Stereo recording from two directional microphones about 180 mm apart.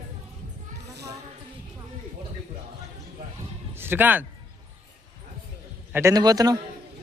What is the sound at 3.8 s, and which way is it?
Speech, 10° right (ahead or behind).